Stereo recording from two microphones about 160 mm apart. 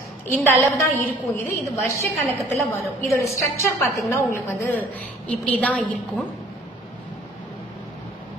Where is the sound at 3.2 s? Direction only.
20° left (ahead or behind).